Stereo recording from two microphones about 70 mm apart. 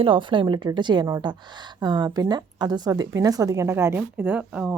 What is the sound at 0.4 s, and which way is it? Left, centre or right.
A woman's voice, right.